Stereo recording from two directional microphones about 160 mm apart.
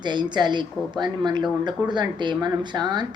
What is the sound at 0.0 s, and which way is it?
Speech, 30° right (ahead or behind).